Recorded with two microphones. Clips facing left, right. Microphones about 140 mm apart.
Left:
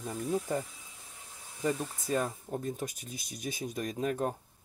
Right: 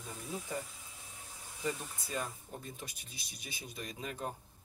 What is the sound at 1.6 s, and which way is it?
Speech, 40° left (ahead or behind).